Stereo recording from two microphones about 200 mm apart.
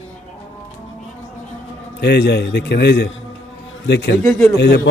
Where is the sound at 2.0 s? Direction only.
55° left (ahead or behind).